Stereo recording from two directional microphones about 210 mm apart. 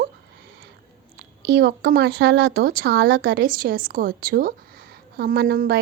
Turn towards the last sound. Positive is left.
turn(degrees=-45)  # may be behind; listen again after turning